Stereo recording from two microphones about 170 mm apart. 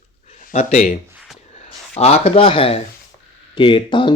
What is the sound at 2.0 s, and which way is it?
Speech, 35° left (ahead or behind).